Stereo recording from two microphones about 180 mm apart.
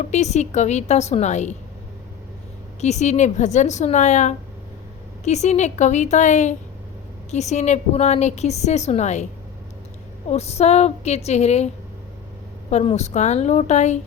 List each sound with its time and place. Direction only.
0.1 s a woman's voice: 40° left (ahead or behind)
2.8 s a woman's voice: 40° left (ahead or behind)
10.2 s a woman's voice: 35° left (ahead or behind)
12.7 s a woman's voice: 35° left (ahead or behind)